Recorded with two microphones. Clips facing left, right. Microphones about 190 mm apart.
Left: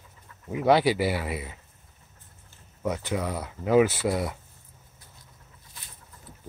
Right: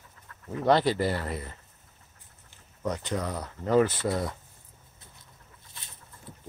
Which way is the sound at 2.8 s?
5° left (ahead or behind).